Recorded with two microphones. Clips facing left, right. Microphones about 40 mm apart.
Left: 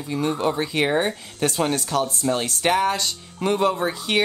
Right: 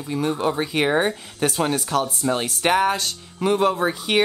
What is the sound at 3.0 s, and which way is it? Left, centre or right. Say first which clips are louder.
Speech: right 1 dB; centre.